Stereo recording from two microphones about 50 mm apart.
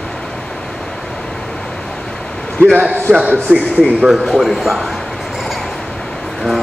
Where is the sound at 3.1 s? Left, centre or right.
Centre.